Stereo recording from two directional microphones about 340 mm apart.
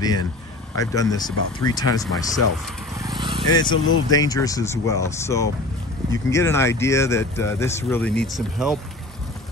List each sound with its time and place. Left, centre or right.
0.7 s speech: centre
3.0 s vehicle: centre
3.5 s speech: centre